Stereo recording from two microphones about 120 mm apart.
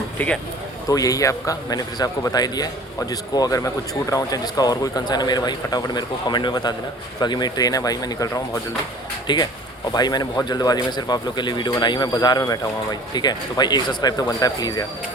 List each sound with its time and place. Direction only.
0.2 s speech: 10° left (ahead or behind)
0.9 s a man's voice: 30° left (ahead or behind)